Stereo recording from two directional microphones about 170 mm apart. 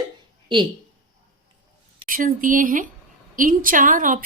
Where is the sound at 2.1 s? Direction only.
50° right (ahead or behind).